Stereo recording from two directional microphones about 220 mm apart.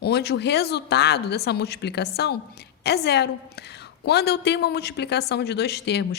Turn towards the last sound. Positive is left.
turn(degrees=50)  # may be behind; listen again after turning